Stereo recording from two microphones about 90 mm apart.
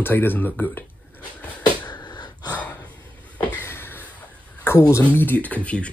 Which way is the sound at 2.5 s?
20° left (ahead or behind).